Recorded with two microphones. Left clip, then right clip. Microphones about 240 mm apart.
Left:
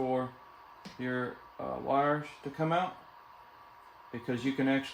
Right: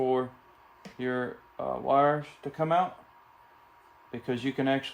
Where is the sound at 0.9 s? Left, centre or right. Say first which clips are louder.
Right 4 dB; right.